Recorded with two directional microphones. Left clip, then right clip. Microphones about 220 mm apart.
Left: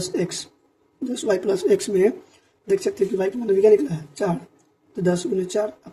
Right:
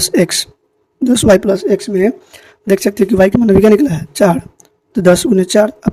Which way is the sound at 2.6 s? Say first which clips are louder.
Right 8 dB; 40° right (ahead or behind).